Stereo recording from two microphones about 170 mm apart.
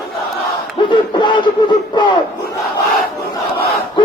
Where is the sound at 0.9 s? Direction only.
30° left (ahead or behind).